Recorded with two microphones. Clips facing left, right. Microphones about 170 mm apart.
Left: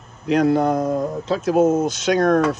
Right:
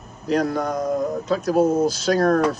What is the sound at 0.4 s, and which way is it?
Speech, 55° left (ahead or behind).